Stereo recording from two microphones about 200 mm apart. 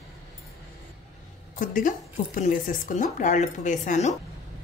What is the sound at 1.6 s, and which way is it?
A woman's voice, 40° left (ahead or behind).